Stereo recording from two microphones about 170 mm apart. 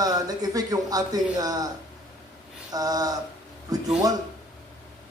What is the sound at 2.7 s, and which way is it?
Speech, 20° right (ahead or behind).